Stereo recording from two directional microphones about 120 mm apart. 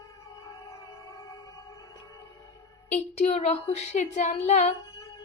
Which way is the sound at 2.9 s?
75° left (ahead or behind).